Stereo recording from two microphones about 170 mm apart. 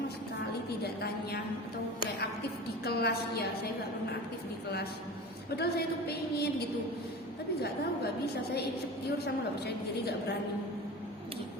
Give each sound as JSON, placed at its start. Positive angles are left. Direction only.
{"t": 2.8, "sound": "a woman's voice", "side_deg": 70}
{"t": 5.5, "sound": "a woman's voice", "side_deg": 70}
{"t": 9.2, "sound": "a woman's voice", "side_deg": 75}